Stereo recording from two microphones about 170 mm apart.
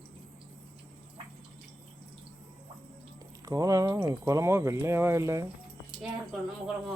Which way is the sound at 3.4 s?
20° right (ahead or behind).